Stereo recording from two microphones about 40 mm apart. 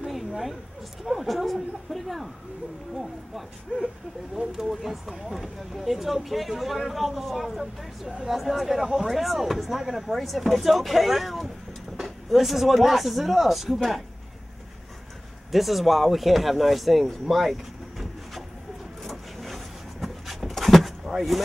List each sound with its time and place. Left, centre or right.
0.0 s a sound: centre
1.0 s speech: centre
4.4 s speech: right
5.1 s speech: centre
15.5 s speech: centre
19.0 s a sound: centre
21.0 s vehicle: centre